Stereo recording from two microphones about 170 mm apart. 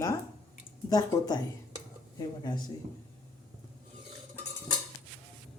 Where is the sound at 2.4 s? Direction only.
25° left (ahead or behind).